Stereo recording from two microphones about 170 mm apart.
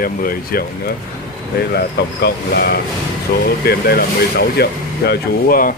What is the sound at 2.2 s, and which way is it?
Speech, 70° left (ahead or behind).